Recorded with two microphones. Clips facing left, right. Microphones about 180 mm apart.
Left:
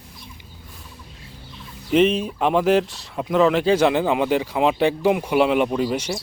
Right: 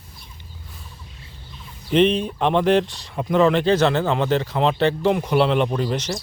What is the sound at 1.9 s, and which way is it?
Speech, 5° left (ahead or behind).